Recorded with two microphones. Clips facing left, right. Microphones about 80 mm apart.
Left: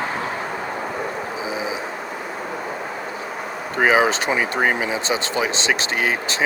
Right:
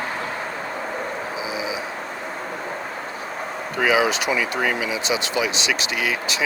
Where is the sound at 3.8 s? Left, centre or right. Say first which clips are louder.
Left 2 dB; left.